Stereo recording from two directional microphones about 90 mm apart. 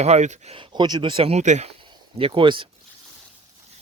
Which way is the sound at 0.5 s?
65° right (ahead or behind).